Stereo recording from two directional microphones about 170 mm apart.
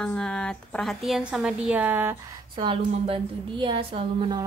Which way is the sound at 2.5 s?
30° right (ahead or behind).